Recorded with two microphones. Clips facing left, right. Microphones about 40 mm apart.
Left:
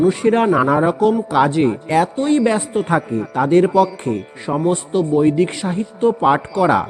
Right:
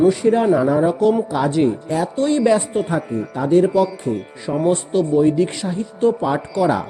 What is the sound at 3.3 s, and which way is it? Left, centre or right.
Speech, left.